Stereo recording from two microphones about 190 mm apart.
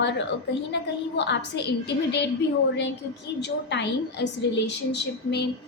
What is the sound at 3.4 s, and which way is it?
A woman's voice, 65° left (ahead or behind).